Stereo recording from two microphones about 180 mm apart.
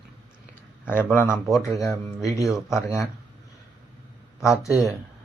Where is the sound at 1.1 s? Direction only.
10° left (ahead or behind).